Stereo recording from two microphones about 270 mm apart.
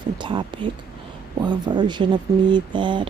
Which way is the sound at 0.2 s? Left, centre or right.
Centre.